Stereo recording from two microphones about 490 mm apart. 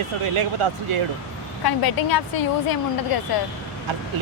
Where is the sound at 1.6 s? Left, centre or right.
Left.